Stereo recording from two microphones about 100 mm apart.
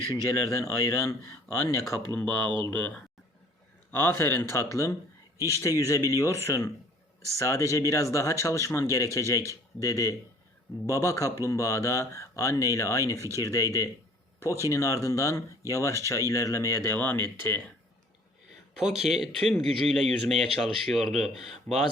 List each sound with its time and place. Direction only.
0.1 s speech: 30° left (ahead or behind)
3.9 s speech: 25° left (ahead or behind)
18.8 s speech: 5° right (ahead or behind)
21.7 s speech: 15° left (ahead or behind)